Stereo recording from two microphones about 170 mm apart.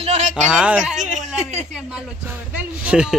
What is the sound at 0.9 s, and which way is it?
Speech, 45° right (ahead or behind).